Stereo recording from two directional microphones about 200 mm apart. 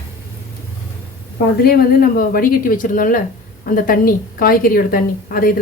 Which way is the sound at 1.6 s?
50° left (ahead or behind).